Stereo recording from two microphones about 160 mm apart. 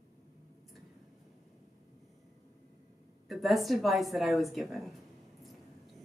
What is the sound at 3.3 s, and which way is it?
A woman's voice, centre (ahead or behind).